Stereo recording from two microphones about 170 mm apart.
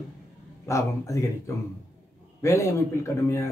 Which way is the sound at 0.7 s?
20° left (ahead or behind).